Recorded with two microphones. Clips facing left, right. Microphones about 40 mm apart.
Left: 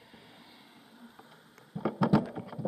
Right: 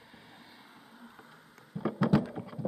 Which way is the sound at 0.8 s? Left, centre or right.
Right.